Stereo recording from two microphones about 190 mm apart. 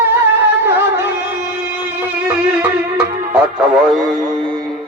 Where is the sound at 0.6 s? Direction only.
10° right (ahead or behind).